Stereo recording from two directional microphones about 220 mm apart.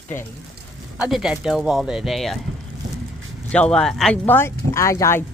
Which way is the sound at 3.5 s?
5° left (ahead or behind).